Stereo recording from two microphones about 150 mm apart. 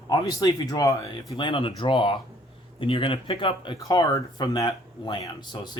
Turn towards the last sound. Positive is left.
turn(degrees=30)  # may be behind; listen again after turning